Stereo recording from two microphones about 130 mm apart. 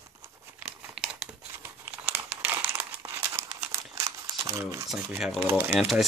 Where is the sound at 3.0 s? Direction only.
20° right (ahead or behind).